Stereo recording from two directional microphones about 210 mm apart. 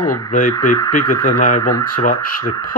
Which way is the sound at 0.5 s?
15° left (ahead or behind).